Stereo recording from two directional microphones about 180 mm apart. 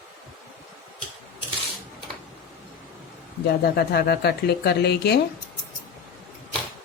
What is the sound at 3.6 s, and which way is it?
A woman's voice, 65° left (ahead or behind).